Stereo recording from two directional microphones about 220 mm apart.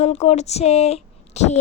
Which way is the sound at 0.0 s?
30° left (ahead or behind).